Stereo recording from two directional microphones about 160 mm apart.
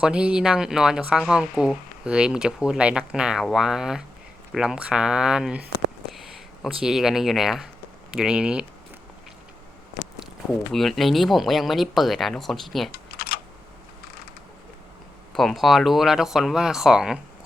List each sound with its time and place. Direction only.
0.0 s speech: 5° right (ahead or behind)
10.7 s speech: centre (ahead or behind)
12.9 s typing: 75° left (ahead or behind)
15.4 s speech: centre (ahead or behind)